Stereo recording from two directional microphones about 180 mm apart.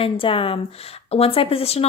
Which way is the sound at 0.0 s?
30° left (ahead or behind).